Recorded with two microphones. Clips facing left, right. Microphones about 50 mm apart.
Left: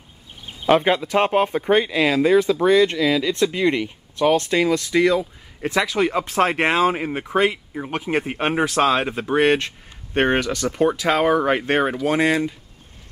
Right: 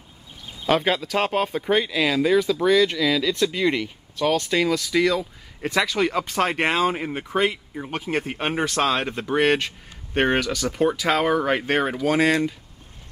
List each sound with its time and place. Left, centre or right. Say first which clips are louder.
0.7 s speech: left 4 dB; centre